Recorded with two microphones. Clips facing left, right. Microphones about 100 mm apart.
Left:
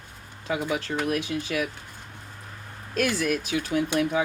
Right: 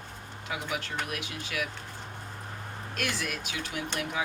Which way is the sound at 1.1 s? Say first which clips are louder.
Left 10 dB; 30° left (ahead or behind).